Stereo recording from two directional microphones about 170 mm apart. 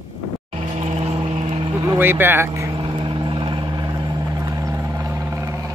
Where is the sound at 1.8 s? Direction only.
10° right (ahead or behind).